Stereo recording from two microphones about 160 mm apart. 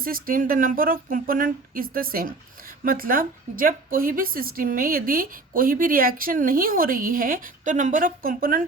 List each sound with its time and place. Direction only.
0.0 s a woman's voice: 60° right (ahead or behind)